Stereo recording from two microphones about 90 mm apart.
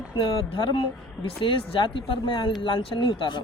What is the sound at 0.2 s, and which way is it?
Speech, 80° left.